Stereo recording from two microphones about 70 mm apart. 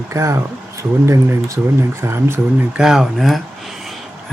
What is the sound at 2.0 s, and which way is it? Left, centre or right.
Speech, right.